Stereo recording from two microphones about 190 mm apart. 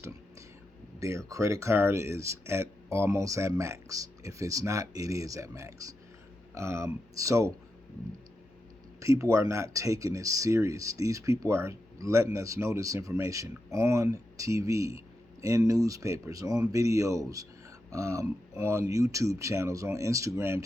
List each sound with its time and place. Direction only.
0.9 s speech: 15° right (ahead or behind)
9.0 s speech: 15° right (ahead or behind)